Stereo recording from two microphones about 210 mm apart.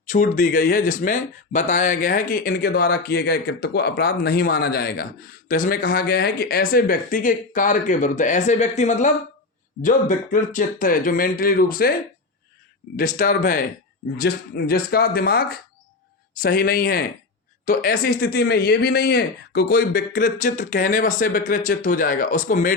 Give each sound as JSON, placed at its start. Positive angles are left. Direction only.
{"t": 0.0, "sound": "speech", "side_deg": 35}
{"t": 13.0, "sound": "speech", "side_deg": 40}